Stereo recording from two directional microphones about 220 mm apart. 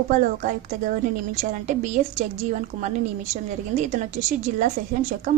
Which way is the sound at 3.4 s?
35° right (ahead or behind).